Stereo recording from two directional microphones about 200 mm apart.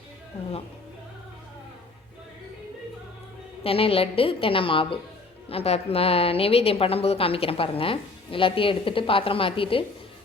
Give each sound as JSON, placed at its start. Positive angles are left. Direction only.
{"t": 3.6, "sound": "a woman's voice", "side_deg": 30}